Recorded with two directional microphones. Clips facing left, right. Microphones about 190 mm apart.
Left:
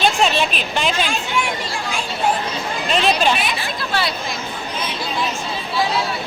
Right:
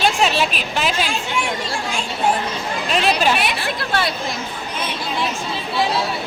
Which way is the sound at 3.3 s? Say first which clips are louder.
Right 2 dB; 65° right (ahead or behind).